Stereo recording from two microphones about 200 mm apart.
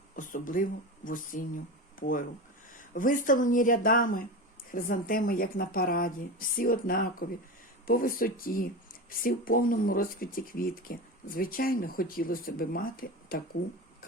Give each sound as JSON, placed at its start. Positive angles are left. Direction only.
{"t": 0.2, "sound": "speech", "side_deg": 40}